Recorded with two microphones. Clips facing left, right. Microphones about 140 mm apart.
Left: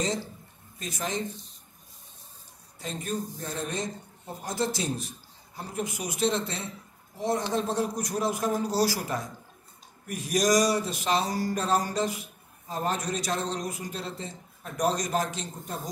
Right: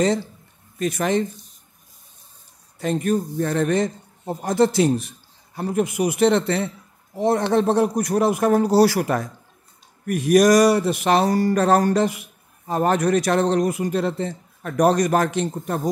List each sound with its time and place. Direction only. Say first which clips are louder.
0.7 s speech: right 12 dB; 65° right (ahead or behind)
2.8 s speech: right 11 dB; 65° right (ahead or behind)